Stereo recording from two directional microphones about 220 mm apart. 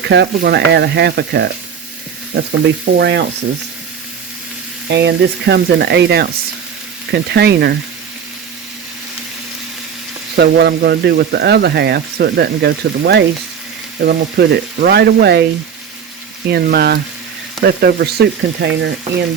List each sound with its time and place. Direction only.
0.1 s speech: 50° right (ahead or behind)
4.9 s speech: 50° right (ahead or behind)
10.3 s speech: 50° right (ahead or behind)
16.5 s speech: 45° right (ahead or behind)